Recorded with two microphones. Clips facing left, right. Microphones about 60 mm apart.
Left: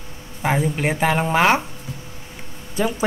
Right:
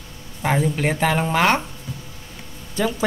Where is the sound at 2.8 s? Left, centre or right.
Centre.